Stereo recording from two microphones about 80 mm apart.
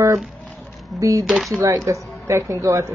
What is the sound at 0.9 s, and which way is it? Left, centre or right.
Speech, right.